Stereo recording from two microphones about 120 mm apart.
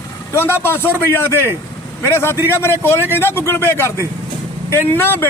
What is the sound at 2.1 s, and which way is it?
Speech, 20° left (ahead or behind).